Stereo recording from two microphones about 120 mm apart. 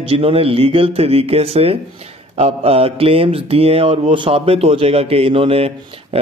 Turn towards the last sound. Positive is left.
turn(degrees=-55)  # may be behind; listen again after turning